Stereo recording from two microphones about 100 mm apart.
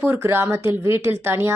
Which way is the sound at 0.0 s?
25° right (ahead or behind).